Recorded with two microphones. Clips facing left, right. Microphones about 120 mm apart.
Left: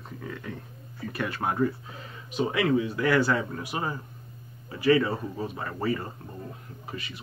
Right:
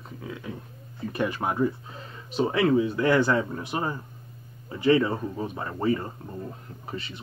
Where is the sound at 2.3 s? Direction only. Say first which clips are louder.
Right 3 dB; 30° right (ahead or behind).